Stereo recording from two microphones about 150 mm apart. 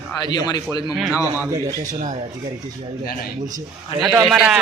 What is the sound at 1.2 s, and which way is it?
Speech, 20° right (ahead or behind).